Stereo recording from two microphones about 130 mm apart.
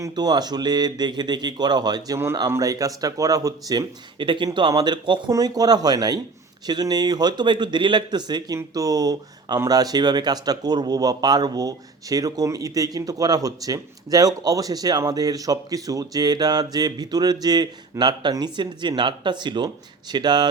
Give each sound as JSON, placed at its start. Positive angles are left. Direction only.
{"t": 0.0, "sound": "speech", "side_deg": -30}